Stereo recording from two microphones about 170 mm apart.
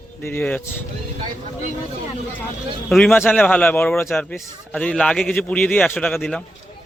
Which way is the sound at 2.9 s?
Centre (ahead or behind).